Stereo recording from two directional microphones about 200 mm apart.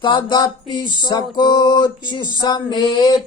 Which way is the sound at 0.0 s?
25° left (ahead or behind).